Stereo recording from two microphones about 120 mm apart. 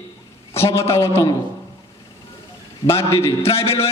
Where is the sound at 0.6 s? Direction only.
20° left (ahead or behind).